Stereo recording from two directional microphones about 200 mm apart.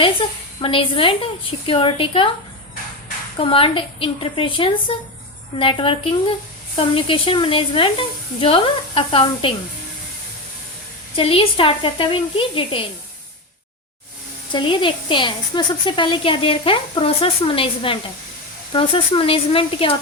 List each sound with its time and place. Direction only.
0.0 s a woman's voice: 25° left (ahead or behind)
3.3 s a woman's voice: 25° left (ahead or behind)
11.2 s a woman's voice: 25° left (ahead or behind)
14.5 s a woman's voice: 25° left (ahead or behind)